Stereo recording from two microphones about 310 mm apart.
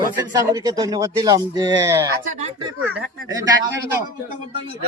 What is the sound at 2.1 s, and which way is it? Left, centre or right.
Speech, right.